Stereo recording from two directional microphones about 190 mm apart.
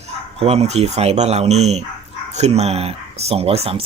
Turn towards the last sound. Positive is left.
turn(degrees=-30)  # may be behind; listen again after turning